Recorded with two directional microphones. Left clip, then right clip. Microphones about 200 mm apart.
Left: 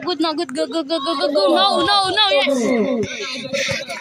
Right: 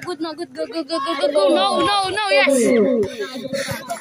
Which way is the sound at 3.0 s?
25° right (ahead or behind).